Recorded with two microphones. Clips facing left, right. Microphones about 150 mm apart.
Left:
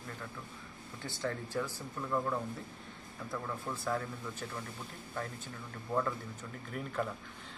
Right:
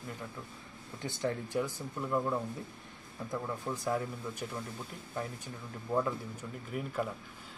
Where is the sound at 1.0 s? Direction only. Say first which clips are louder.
Right 3 dB; 20° right (ahead or behind).